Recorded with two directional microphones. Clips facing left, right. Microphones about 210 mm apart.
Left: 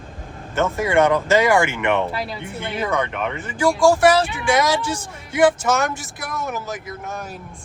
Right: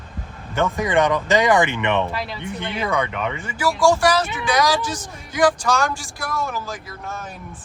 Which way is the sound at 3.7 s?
Centre (ahead or behind).